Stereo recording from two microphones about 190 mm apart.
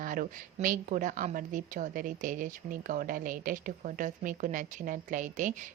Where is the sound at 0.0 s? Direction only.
45° right (ahead or behind).